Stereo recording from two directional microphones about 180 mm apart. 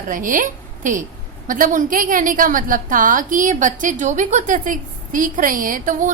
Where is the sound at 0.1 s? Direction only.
50° right (ahead or behind).